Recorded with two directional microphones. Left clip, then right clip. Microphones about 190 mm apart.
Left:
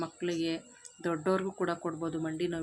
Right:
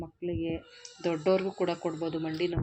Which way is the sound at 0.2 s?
50° left (ahead or behind).